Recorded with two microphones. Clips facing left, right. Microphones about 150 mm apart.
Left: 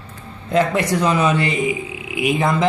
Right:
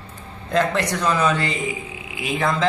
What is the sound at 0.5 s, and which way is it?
Speech, 10° left (ahead or behind).